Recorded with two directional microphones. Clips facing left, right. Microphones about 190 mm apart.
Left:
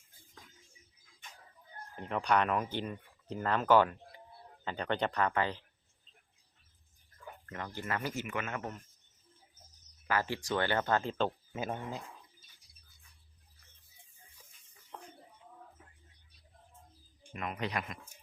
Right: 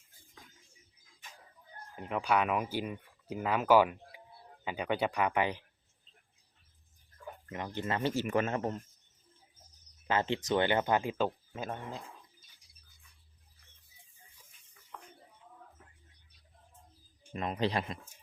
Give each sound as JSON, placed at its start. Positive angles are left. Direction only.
{"t": 2.0, "sound": "speech", "side_deg": -5}
{"t": 7.4, "sound": "speech", "side_deg": -20}
{"t": 10.1, "sound": "speech", "side_deg": -20}
{"t": 11.5, "sound": "speech", "side_deg": 5}
{"t": 14.9, "sound": "a sound", "side_deg": 25}
{"t": 17.3, "sound": "speech", "side_deg": -30}